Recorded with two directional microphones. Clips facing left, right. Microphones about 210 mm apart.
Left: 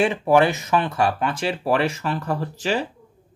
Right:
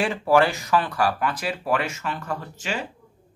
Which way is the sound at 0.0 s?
20° left (ahead or behind).